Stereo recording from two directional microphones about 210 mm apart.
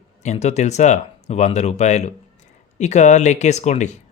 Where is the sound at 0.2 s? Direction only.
30° left (ahead or behind).